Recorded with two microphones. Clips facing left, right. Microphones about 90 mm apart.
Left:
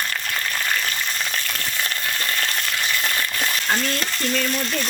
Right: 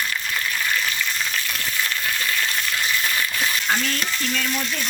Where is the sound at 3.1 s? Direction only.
50° left (ahead or behind).